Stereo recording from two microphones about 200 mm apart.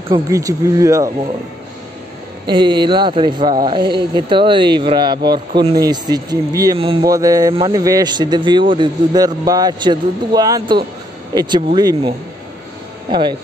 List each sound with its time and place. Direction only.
0.1 s speech: 15° right (ahead or behind)
2.4 s a man's voice: 25° right (ahead or behind)